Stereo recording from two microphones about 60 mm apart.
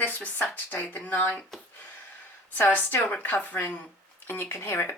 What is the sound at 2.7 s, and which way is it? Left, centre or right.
Speech, left.